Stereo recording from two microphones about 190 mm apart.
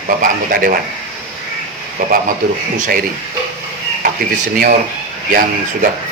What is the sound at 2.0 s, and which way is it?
Speech, 45° right (ahead or behind).